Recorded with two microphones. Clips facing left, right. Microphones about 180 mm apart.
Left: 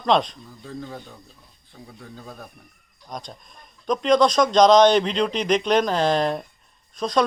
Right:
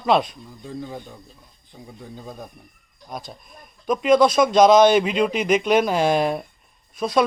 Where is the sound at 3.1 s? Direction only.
5° right (ahead or behind).